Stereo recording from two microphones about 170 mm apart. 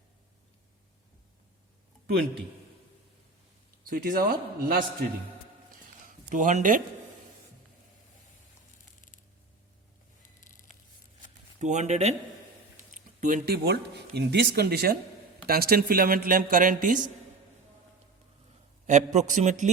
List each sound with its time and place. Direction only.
3.8 s speech: 55° right (ahead or behind)
6.1 s a man's voice: 50° right (ahead or behind)
9.0 s a sound: 50° left (ahead or behind)
10.2 s a sound: 50° left (ahead or behind)
11.6 s speech: 45° right (ahead or behind)
18.9 s speech: 45° right (ahead or behind)